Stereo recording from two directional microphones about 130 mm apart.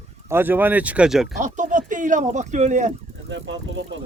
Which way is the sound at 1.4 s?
75° right (ahead or behind).